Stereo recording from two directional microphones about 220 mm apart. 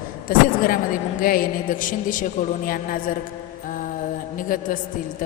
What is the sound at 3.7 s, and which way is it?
Mantra, 35° left (ahead or behind).